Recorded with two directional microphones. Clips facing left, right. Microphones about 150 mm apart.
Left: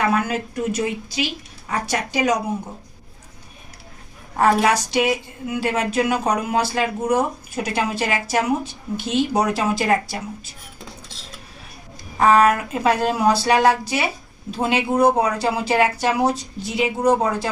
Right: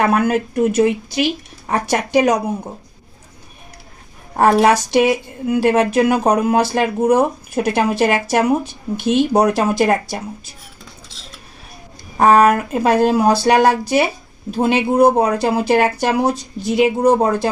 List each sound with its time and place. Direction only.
0.0 s a woman's voice: 55° right (ahead or behind)
4.4 s a woman's voice: 50° right (ahead or behind)
12.1 s a woman's voice: 45° right (ahead or behind)